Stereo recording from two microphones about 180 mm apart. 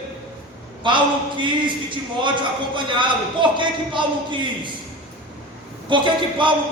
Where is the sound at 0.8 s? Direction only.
25° right (ahead or behind).